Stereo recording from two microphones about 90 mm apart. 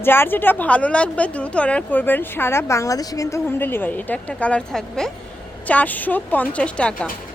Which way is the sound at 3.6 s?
20° left (ahead or behind).